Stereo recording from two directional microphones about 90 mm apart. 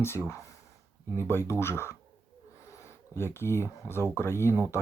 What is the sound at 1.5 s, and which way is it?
Speech, 30° left (ahead or behind).